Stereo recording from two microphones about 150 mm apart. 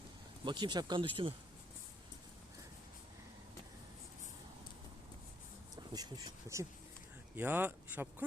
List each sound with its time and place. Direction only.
0.4 s speech: 30° right (ahead or behind)
5.7 s speech: 25° right (ahead or behind)